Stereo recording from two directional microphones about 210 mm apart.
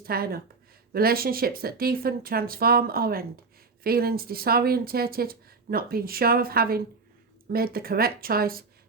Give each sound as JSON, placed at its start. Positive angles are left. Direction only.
{"t": 0.0, "sound": "speech", "side_deg": -45}